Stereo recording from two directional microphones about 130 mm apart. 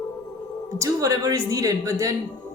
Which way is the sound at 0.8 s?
25° right (ahead or behind).